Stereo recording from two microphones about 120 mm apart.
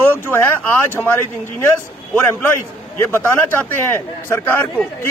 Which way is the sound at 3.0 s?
15° left (ahead or behind).